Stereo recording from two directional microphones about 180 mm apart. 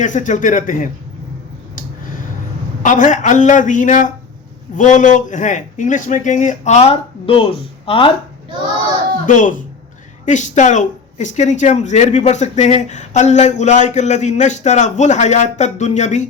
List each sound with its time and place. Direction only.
0.0 s a man's voice: 45° left (ahead or behind)
2.8 s a man's voice: 45° left (ahead or behind); by 8.1 s 30° left (ahead or behind)
9.2 s speech: 45° left (ahead or behind)